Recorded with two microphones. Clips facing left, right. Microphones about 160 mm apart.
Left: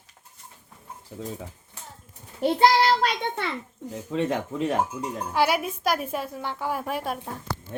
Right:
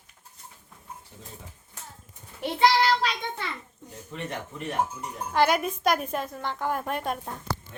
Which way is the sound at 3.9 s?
90° left.